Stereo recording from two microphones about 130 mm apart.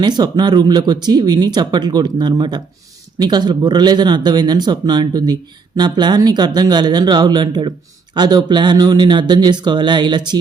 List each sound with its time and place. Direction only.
0.0 s speech: 35° right (ahead or behind)